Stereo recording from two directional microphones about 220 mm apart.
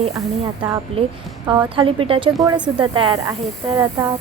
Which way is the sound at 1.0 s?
25° right (ahead or behind).